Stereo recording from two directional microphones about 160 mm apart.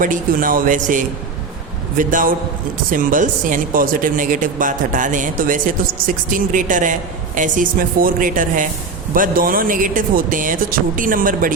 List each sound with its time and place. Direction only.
0.0 s speech: 55° right (ahead or behind)